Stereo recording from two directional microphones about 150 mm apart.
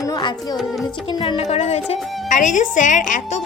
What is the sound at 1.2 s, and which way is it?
A woman's voice, 45° left (ahead or behind).